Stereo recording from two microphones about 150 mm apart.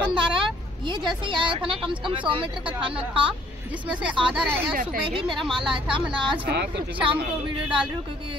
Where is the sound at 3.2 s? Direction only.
10° right (ahead or behind).